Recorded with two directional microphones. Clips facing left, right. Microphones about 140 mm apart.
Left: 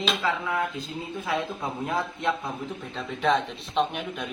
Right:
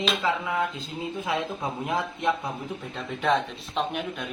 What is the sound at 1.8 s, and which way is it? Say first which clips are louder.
Speech: right 1 dB; 15° right (ahead or behind).